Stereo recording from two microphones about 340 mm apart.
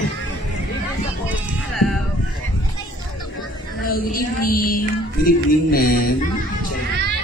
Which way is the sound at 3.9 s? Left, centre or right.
Left.